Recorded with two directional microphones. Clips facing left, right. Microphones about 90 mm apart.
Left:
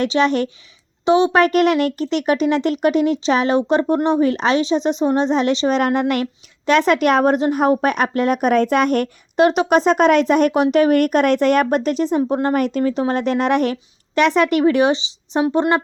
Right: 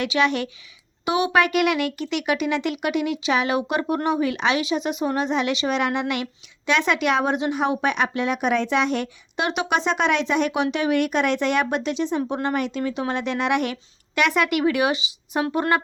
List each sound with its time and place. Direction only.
0.0 s a woman's voice: 35° left (ahead or behind)
1.0 s a woman's voice: 25° left (ahead or behind)